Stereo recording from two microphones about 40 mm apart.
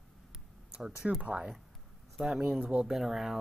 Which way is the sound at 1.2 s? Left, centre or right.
Right.